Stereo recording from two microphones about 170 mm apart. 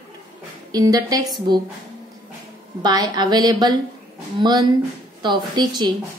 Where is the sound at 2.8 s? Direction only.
25° right (ahead or behind).